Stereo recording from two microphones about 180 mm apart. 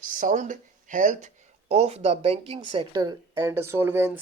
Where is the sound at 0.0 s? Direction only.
45° right (ahead or behind).